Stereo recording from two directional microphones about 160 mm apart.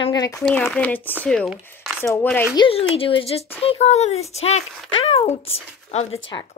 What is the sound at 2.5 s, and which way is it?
Speech, 35° left (ahead or behind).